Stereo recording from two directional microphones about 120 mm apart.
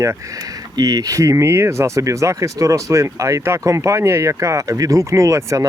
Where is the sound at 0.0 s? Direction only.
25° right (ahead or behind).